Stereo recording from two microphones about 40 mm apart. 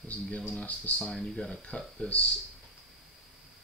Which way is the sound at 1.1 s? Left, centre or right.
Centre.